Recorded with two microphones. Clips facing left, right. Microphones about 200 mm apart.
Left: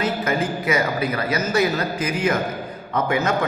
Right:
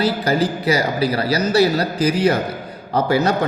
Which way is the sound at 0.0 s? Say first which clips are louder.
Right 4 dB; 35° right (ahead or behind).